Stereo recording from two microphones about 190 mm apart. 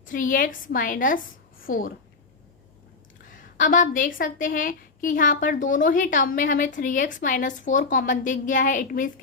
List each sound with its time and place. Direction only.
0.0 s a woman's voice: 45° left (ahead or behind)
3.3 s a woman's voice: 45° left (ahead or behind)